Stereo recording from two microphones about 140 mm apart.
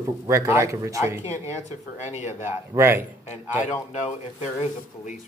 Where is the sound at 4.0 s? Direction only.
55° left (ahead or behind).